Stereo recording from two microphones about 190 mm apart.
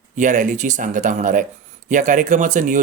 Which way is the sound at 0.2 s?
40° right (ahead or behind).